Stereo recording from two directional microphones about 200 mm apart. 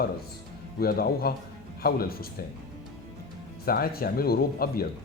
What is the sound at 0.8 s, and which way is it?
Speech, 50° left (ahead or behind).